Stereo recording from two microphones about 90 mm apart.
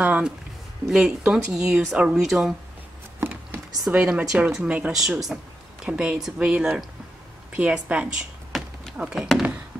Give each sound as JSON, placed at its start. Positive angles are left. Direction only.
{"t": 0.0, "sound": "speech", "side_deg": -15}
{"t": 3.2, "sound": "patter", "side_deg": -25}
{"t": 3.9, "sound": "speech", "side_deg": -10}
{"t": 4.6, "sound": "speech", "side_deg": -15}
{"t": 4.9, "sound": "speech", "side_deg": -5}